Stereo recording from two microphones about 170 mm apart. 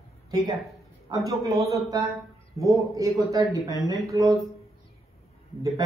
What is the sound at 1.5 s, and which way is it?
Speech, centre (ahead or behind).